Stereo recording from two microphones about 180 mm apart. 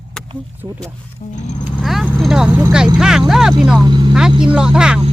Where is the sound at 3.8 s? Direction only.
25° right (ahead or behind).